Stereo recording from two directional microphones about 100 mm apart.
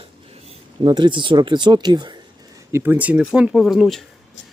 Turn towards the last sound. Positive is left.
turn(degrees=0)  # may be behind; listen again after turning